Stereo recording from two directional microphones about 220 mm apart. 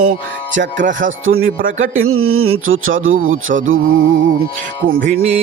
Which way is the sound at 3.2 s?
35° right (ahead or behind).